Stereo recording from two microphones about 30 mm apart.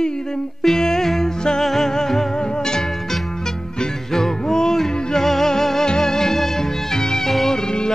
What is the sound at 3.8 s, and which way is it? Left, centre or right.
Music, centre.